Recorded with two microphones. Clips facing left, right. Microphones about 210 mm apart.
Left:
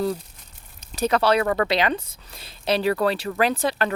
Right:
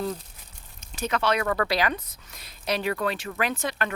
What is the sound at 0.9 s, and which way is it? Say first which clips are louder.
A woman's voice: left 6 dB; 35° left (ahead or behind).